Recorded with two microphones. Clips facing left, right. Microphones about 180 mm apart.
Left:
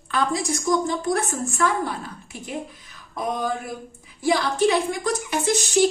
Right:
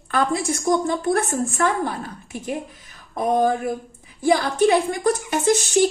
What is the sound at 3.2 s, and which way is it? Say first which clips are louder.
A woman's voice: right 7 dB; 50° right (ahead or behind).